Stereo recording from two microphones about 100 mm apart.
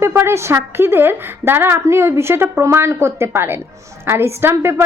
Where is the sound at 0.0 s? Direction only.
25° right (ahead or behind).